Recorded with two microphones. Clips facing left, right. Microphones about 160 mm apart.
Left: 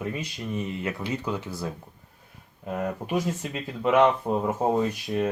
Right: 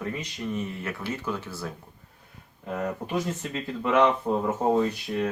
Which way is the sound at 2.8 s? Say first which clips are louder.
Left 1 dB; 10° left (ahead or behind).